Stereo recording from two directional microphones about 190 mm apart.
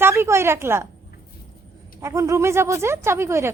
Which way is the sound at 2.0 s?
15° right (ahead or behind).